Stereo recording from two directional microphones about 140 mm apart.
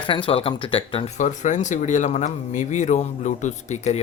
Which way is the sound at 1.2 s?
60° left (ahead or behind).